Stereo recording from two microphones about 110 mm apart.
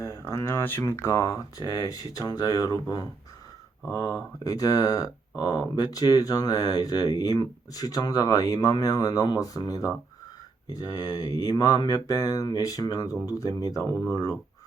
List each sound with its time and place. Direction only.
0.0 s speech: 30° left (ahead or behind)